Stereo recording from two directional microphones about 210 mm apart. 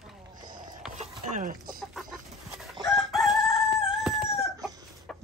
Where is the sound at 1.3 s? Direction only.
40° right (ahead or behind).